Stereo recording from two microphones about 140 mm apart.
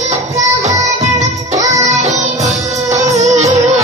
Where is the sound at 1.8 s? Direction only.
55° right (ahead or behind).